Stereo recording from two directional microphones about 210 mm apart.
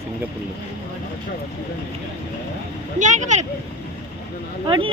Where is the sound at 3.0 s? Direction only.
35° right (ahead or behind).